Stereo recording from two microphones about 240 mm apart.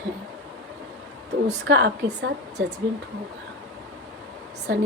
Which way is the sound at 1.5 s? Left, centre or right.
Right.